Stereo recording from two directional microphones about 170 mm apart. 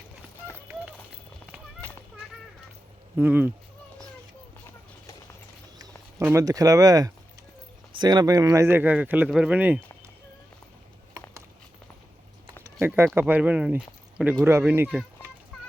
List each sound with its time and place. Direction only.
3.2 s speech: 10° right (ahead or behind)
6.2 s speech: 20° right (ahead or behind)
12.8 s speech: 15° right (ahead or behind)